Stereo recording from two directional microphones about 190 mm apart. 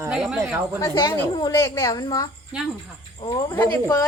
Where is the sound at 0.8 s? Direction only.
20° left (ahead or behind).